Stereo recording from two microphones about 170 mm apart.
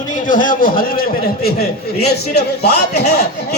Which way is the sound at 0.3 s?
50° left (ahead or behind).